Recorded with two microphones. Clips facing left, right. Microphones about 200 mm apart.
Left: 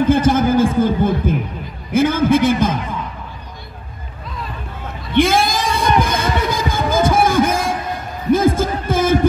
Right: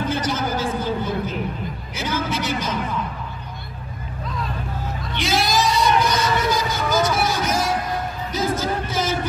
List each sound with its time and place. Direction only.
0.1 s a sound: 50° left (ahead or behind)
5.1 s heart murmur: 50° left (ahead or behind)
8.3 s music: 50° left (ahead or behind)